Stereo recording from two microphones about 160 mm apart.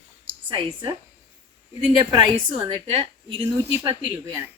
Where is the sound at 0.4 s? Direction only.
30° right (ahead or behind).